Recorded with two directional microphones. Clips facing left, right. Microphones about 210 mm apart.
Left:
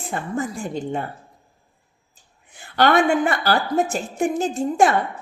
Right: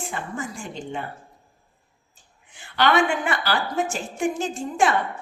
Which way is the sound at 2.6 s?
45° left (ahead or behind).